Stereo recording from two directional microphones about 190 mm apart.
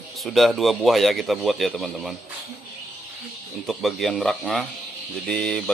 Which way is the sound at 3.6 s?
Centre (ahead or behind).